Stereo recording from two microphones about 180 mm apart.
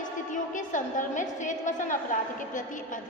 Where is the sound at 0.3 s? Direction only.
45° left (ahead or behind).